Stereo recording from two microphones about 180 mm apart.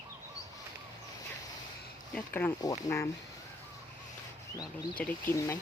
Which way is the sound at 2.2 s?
10° left (ahead or behind).